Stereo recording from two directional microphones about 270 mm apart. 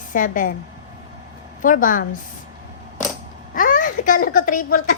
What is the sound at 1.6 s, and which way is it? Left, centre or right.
Speech, left.